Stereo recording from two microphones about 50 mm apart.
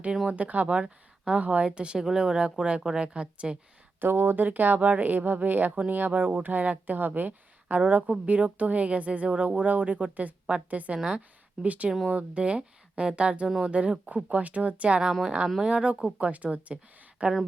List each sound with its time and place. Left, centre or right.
0.3 s speech: right
4.0 s speech: right